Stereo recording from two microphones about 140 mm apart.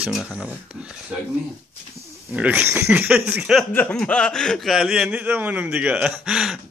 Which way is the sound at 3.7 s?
10° left (ahead or behind).